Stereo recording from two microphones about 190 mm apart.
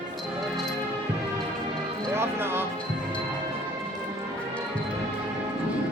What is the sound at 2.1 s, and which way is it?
Music, 10° right (ahead or behind).